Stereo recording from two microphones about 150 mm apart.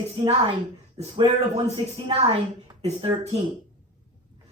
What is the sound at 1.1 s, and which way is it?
A woman's voice, 40° right (ahead or behind).